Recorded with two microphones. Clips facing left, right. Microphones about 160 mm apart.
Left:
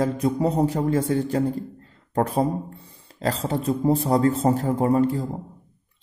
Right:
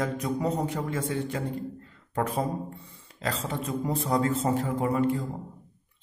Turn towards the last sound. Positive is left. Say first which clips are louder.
# left 5 dB
turn(degrees=35)  # may be behind; listen again after turning